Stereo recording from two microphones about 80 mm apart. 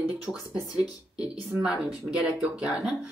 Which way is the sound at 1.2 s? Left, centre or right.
Centre.